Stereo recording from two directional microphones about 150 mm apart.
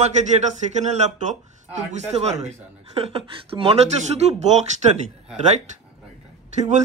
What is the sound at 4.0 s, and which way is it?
Speech, 45° right (ahead or behind).